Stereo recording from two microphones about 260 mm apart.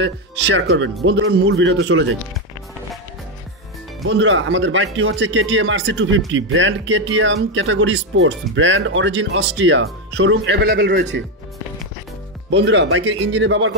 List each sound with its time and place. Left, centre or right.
0.0 s speech: right
4.1 s speech: right
12.4 s speech: right